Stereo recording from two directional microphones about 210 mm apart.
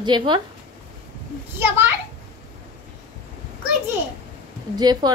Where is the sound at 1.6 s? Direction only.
10° right (ahead or behind).